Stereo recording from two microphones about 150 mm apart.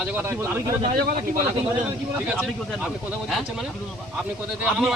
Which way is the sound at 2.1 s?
5° right (ahead or behind).